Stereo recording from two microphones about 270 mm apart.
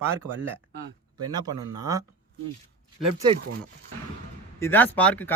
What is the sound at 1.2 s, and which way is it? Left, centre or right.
Speech, centre.